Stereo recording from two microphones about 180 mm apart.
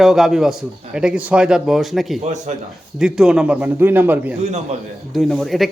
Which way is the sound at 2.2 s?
40° right (ahead or behind).